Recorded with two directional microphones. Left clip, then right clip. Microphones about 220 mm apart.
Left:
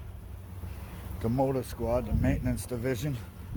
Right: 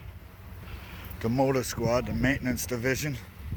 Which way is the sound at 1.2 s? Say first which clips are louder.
Right 3 dB; 15° right (ahead or behind).